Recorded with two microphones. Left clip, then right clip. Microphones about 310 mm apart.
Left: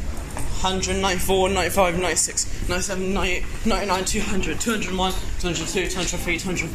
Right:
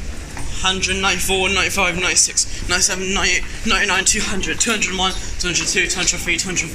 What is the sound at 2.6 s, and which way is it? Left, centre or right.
Speech, centre.